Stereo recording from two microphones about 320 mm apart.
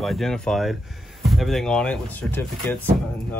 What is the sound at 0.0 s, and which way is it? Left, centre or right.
Speech, centre.